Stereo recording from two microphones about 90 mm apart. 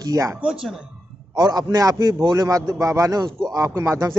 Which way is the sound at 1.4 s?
50° right (ahead or behind).